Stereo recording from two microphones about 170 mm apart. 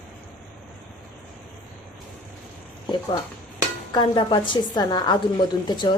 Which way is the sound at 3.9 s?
25° left (ahead or behind).